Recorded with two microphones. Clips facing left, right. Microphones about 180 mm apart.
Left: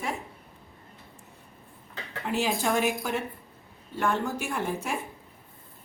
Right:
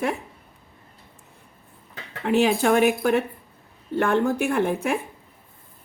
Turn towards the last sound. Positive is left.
turn(degrees=-60)  # may be behind; listen again after turning